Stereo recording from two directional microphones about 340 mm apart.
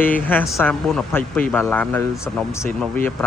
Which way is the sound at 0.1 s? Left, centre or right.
Centre.